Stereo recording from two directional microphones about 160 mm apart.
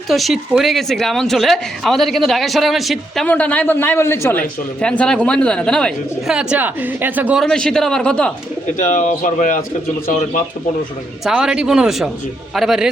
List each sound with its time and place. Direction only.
0.1 s a woman's voice: centre (ahead or behind)
3.2 s speech: 10° left (ahead or behind); by 7.4 s 10° right (ahead or behind)
7.4 s a woman's voice: 5° left (ahead or behind)
8.8 s speech: 50° left (ahead or behind)
11.2 s a woman's voice: centre (ahead or behind)